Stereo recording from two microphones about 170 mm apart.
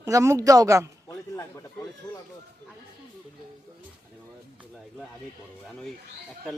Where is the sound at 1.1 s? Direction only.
15° left (ahead or behind).